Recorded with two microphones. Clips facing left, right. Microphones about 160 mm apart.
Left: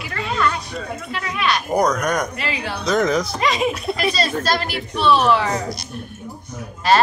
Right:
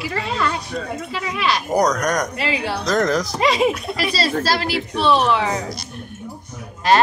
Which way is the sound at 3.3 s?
30° right (ahead or behind).